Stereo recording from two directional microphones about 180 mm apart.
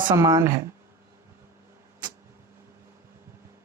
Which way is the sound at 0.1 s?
20° right (ahead or behind).